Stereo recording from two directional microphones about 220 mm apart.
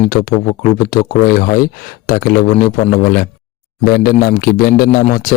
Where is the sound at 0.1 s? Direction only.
40° left (ahead or behind).